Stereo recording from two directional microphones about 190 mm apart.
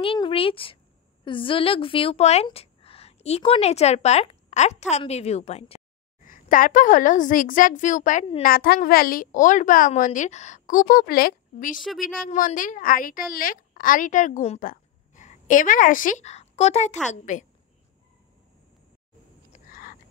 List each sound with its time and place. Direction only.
0.0 s a woman's voice: 30° left (ahead or behind)
6.2 s a woman's voice: 45° left (ahead or behind)
11.7 s a woman's voice: centre (ahead or behind)
12.3 s a woman's voice: 45° left (ahead or behind)
19.5 s frog: 45° left (ahead or behind)